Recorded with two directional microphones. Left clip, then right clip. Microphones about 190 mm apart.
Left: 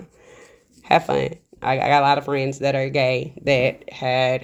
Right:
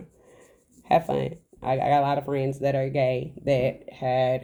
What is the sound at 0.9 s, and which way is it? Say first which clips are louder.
Speech: left 5 dB; 15° left (ahead or behind).